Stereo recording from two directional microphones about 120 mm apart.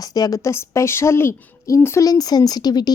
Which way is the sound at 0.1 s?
30° left (ahead or behind).